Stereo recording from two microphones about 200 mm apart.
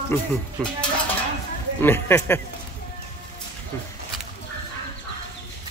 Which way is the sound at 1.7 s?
10° left (ahead or behind).